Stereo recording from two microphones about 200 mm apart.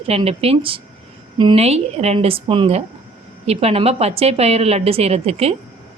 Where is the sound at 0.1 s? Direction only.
30° right (ahead or behind).